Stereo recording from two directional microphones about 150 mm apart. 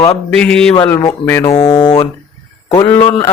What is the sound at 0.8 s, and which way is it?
Speech, 20° left (ahead or behind).